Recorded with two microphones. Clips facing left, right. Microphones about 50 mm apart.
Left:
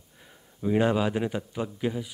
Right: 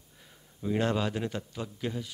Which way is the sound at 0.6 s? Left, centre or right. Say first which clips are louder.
Left 5 dB; centre.